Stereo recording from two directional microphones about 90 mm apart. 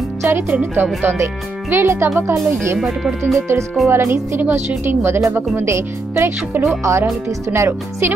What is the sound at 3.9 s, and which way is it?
Speech, 30° right (ahead or behind).